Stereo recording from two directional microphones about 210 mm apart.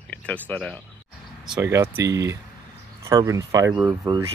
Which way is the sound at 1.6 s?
15° right (ahead or behind).